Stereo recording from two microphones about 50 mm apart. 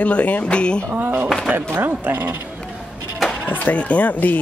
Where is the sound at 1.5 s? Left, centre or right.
Right.